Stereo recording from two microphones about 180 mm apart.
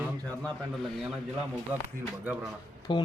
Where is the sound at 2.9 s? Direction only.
25° left (ahead or behind).